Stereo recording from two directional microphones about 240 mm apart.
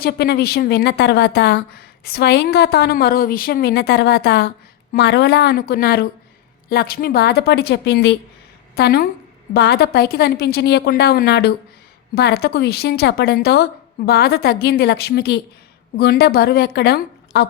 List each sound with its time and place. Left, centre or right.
0.0 s a woman's voice: left